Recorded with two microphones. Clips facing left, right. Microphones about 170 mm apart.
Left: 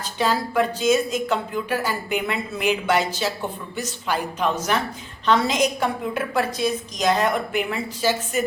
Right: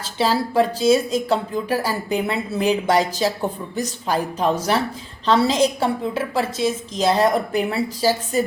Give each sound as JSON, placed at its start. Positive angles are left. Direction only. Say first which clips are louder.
{"t": 0.2, "sound": "a woman's voice", "louder": "right 3 dB", "side_deg": -30}